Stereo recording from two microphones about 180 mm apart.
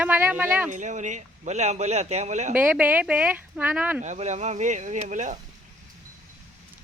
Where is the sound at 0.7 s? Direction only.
40° right (ahead or behind).